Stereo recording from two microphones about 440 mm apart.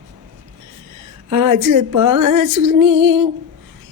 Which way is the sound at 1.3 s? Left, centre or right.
Right.